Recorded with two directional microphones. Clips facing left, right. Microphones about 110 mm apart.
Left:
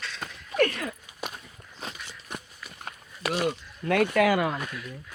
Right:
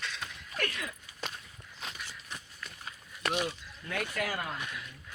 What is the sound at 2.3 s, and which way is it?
Walk, 55° left (ahead or behind).